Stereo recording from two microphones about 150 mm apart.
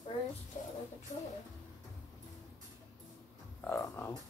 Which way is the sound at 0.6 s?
55° left (ahead or behind).